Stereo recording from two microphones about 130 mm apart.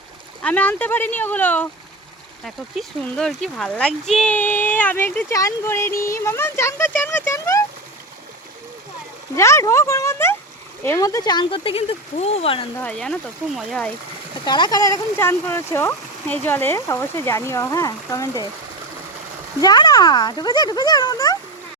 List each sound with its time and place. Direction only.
0.4 s speech: 10° left (ahead or behind)
2.4 s speech: 5° left (ahead or behind); by 7.6 s 25° left (ahead or behind)
9.3 s speech: 20° left (ahead or behind); by 12.6 s 50° left (ahead or behind)
12.8 s speech: 5° left (ahead or behind)
14.4 s speech: 35° left (ahead or behind)
19.6 s speech: 30° left (ahead or behind)